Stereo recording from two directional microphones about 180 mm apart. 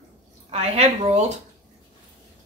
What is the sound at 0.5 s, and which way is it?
Speech, 35° right (ahead or behind).